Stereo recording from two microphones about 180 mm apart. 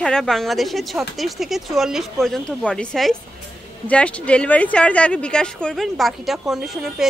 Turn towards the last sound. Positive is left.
turn(degrees=0)  # may be behind; listen again after turning